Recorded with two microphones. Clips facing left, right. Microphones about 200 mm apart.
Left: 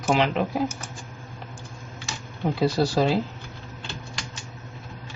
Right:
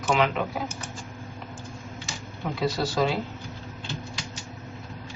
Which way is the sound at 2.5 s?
35° left (ahead or behind).